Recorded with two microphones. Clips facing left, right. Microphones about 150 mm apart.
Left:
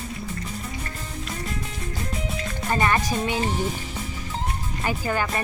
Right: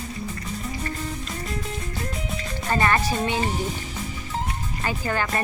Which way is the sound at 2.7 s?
15° left (ahead or behind).